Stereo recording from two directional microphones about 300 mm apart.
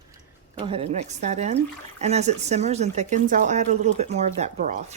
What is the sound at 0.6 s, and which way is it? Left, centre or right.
Speech, centre.